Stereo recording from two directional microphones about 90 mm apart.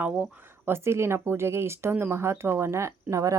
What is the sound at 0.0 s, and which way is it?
Speech, 20° right (ahead or behind).